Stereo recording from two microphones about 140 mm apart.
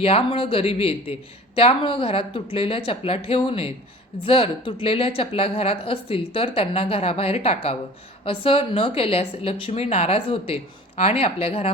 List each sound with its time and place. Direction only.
0.0 s a woman's voice: 40° left (ahead or behind)